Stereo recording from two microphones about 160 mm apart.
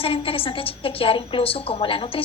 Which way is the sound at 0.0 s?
35° left (ahead or behind).